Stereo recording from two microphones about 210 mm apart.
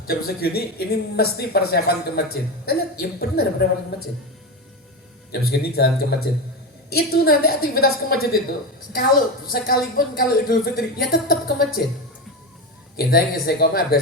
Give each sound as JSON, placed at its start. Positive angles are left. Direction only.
{"t": 0.1, "sound": "a woman's voice", "side_deg": 45}
{"t": 5.3, "sound": "a woman's voice", "side_deg": 50}
{"t": 13.0, "sound": "a woman's voice", "side_deg": 45}